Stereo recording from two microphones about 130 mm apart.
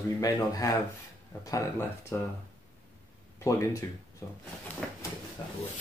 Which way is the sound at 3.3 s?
25° left (ahead or behind).